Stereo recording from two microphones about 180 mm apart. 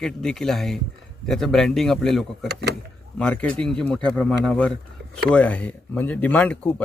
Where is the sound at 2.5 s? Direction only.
65° right (ahead or behind).